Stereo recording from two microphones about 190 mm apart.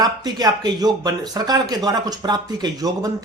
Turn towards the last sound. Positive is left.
turn(degrees=-20)  # may be behind; listen again after turning